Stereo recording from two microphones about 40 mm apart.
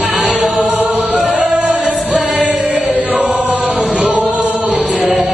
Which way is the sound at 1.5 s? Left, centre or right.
Right.